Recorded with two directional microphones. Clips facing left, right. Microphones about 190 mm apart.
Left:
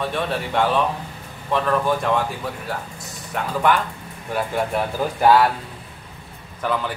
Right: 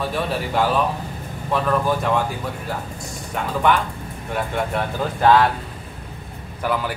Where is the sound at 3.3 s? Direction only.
Centre (ahead or behind).